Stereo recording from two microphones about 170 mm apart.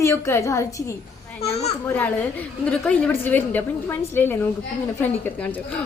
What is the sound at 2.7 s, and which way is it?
A woman's voice, 5° left (ahead or behind).